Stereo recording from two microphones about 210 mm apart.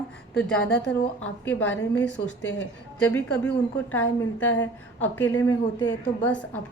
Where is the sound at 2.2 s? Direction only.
55° left (ahead or behind).